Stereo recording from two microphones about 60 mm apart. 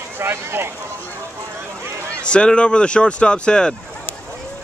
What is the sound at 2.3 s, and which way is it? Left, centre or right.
Speech, centre.